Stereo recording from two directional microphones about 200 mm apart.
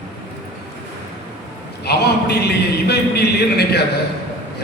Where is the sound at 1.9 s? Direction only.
55° left (ahead or behind).